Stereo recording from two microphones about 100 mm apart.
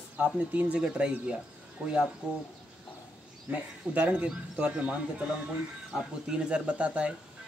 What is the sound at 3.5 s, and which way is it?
Speech, 15° right (ahead or behind).